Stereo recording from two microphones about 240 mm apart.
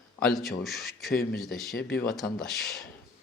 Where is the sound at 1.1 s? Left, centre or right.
Left.